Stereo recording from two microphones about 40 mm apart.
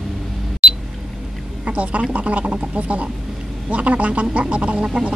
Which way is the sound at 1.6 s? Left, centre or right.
Right.